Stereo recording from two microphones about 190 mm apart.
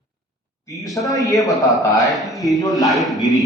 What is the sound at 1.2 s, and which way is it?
Speech, 20° left (ahead or behind).